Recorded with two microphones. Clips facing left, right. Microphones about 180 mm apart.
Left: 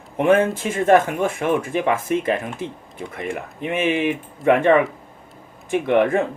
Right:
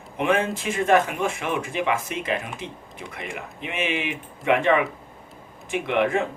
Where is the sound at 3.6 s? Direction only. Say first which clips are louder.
Left 7 dB; 45° left (ahead or behind).